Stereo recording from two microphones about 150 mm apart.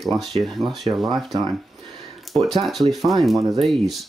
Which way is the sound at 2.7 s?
Centre (ahead or behind).